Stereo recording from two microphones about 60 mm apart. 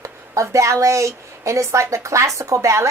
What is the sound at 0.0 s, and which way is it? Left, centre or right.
A woman's voice, right.